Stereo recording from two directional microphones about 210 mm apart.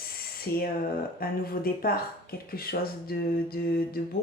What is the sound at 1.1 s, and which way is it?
Speech, 45° left (ahead or behind).